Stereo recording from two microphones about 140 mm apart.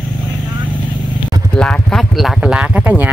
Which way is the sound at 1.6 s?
5° left (ahead or behind).